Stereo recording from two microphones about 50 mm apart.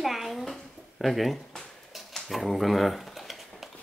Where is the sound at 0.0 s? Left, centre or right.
Centre.